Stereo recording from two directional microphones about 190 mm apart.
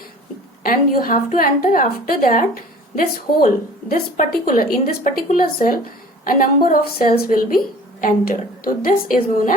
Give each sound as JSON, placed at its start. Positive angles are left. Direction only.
{"t": 0.6, "sound": "a woman's voice", "side_deg": 50}
{"t": 3.4, "sound": "a woman's voice", "side_deg": 50}